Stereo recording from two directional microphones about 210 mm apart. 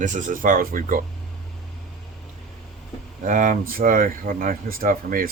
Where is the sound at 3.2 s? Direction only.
40° right (ahead or behind).